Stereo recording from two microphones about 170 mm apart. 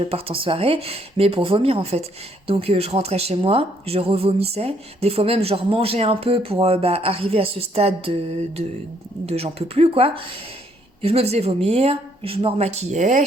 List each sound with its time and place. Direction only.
0.0 s speech: 35° right (ahead or behind)